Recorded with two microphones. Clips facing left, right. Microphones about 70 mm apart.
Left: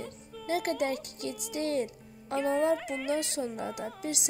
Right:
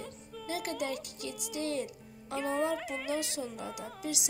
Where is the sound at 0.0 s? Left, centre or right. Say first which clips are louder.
Left 2 dB; centre.